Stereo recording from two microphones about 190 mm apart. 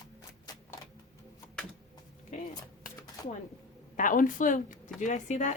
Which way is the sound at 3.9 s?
45° left (ahead or behind).